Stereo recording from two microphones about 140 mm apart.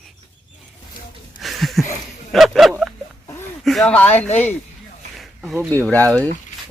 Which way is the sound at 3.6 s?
Centre (ahead or behind).